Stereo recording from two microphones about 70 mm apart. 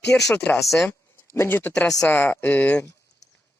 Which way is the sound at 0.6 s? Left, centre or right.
Centre.